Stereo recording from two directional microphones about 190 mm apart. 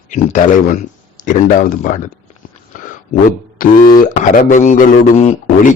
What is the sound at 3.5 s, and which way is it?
A man's voice, 45° left (ahead or behind).